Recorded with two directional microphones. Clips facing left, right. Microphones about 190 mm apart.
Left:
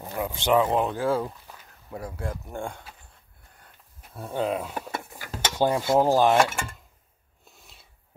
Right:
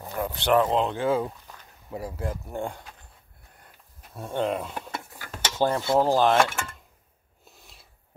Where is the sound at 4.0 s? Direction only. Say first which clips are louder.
Right 1 dB; 5° left (ahead or behind).